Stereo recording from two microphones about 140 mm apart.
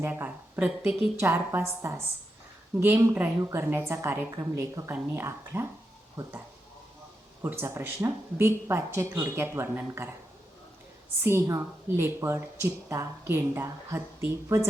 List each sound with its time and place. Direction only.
0.0 s a woman's voice: 10° right (ahead or behind)
7.4 s a woman's voice: 15° right (ahead or behind)
11.2 s a woman's voice: 15° right (ahead or behind)